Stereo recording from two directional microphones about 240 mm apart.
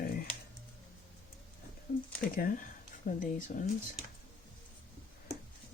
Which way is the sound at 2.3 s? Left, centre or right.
Left.